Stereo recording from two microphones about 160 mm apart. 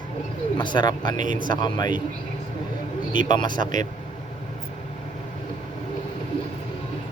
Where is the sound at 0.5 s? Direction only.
30° left (ahead or behind).